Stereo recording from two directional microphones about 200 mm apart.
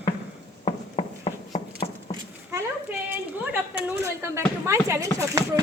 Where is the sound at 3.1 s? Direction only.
10° right (ahead or behind).